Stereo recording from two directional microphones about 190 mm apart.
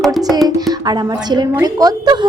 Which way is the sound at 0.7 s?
20° right (ahead or behind).